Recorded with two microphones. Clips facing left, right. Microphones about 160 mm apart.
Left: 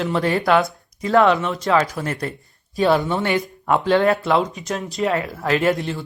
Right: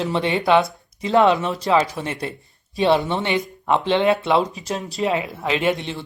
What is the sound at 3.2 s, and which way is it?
Speech, 20° right (ahead or behind).